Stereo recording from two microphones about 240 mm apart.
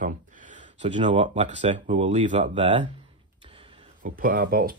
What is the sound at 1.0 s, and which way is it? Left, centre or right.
Speech, right.